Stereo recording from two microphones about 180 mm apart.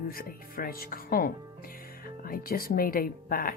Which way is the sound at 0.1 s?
55° left (ahead or behind).